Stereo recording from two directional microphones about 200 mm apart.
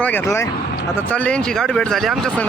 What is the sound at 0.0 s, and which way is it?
Speech, 10° left (ahead or behind).